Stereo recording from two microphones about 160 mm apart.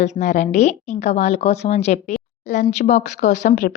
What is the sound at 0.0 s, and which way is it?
A woman's voice, 45° left (ahead or behind).